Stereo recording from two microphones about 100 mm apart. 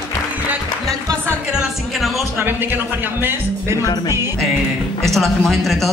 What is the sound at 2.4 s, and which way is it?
Speech, 20° right (ahead or behind).